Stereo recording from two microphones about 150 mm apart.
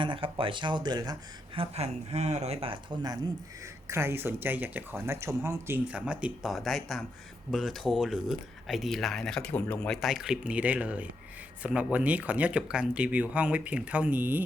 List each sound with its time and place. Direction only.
0.0 s speech: 35° right (ahead or behind)
1.5 s speech: 45° right (ahead or behind)
3.8 s speech: 15° right (ahead or behind)